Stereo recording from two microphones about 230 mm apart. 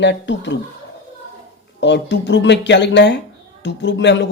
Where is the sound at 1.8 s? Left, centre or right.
Left.